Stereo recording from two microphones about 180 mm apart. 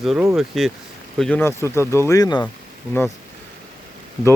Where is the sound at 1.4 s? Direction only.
15° left (ahead or behind).